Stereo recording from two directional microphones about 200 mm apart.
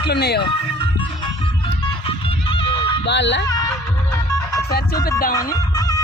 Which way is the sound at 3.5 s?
20° left (ahead or behind).